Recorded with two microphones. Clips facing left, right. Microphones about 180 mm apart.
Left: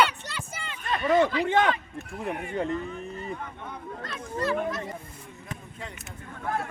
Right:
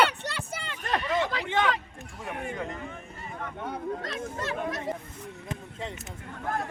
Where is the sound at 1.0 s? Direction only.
40° left (ahead or behind).